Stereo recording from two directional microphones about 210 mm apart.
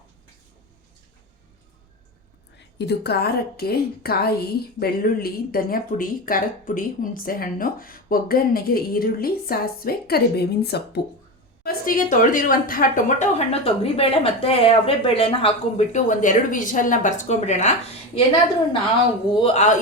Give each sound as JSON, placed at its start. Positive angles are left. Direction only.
{"t": 2.6, "sound": "speech", "side_deg": 55}
{"t": 19.3, "sound": "speech", "side_deg": 25}